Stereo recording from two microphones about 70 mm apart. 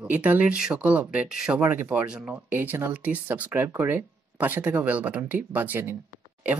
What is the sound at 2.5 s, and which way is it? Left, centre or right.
Speech, right.